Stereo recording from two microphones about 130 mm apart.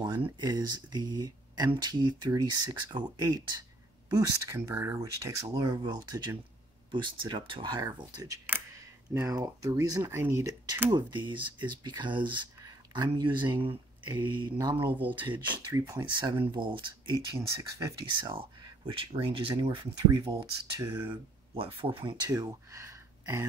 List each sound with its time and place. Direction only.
0.0 s speech: 35° right (ahead or behind)
8.5 s speech: 20° right (ahead or behind)
10.9 s speech: 35° right (ahead or behind)
15.7 s speech: 25° right (ahead or behind)
16.5 s speech: 40° right (ahead or behind)
17.4 s speech: 20° right (ahead or behind)
18.3 s a sound: 40° right (ahead or behind)
19.2 s speech: 45° right (ahead or behind)
20.1 s speech: 30° right (ahead or behind)
20.8 s speech: 15° right (ahead or behind)
21.1 s speech: 45° right (ahead or behind); by 23.4 s 25° right (ahead or behind)